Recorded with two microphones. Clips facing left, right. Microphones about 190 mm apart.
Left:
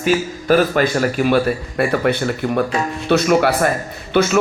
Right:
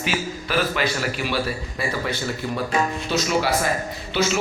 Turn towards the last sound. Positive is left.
turn(degrees=55)  # may be behind; listen again after turning